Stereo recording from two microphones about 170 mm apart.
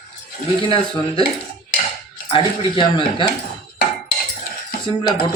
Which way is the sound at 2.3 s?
30° left (ahead or behind).